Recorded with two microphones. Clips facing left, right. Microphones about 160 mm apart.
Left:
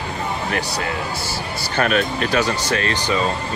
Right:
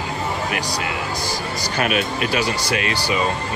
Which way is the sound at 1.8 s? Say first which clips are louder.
Left 3 dB; 35° left (ahead or behind).